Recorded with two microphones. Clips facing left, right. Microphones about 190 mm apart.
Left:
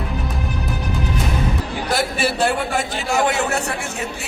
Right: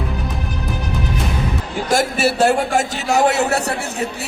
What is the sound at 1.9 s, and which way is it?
Speech, 45° right (ahead or behind).